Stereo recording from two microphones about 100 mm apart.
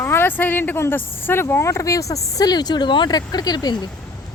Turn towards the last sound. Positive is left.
turn(degrees=45)  # may be behind; listen again after turning